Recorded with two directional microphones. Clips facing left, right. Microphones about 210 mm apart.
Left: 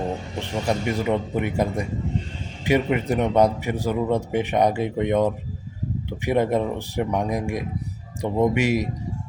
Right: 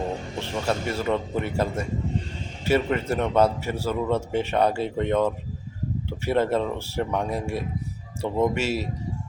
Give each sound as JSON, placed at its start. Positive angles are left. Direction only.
{"t": 0.3, "sound": "a man's voice", "side_deg": 15}